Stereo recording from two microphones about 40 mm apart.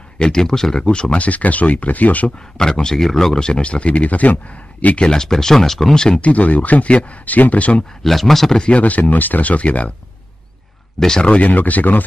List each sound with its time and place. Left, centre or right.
0.2 s speech: centre
1.2 s speech: left
2.5 s speech: centre
3.3 s speech: left
5.1 s speech: centre
5.9 s speech: centre
6.2 s speech: left
7.2 s speech: left
8.0 s speech: centre
8.5 s speech: left
8.8 s speech: left
11.1 s speech: left
11.4 s speech: left